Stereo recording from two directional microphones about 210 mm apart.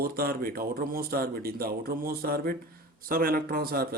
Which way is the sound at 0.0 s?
45° right (ahead or behind).